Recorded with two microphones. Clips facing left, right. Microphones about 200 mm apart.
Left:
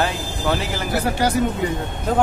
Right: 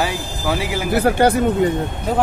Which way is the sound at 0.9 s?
60° right (ahead or behind).